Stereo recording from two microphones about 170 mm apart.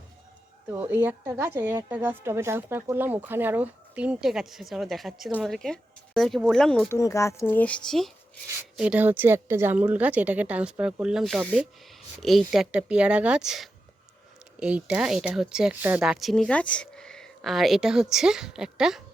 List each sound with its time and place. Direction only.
0.7 s a woman's voice: 10° right (ahead or behind)
6.8 s a woman's voice: 15° left (ahead or behind); by 19.0 s 5° right (ahead or behind)